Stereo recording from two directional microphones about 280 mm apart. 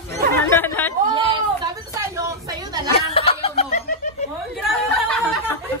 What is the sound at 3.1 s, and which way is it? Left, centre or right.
Snicker, left.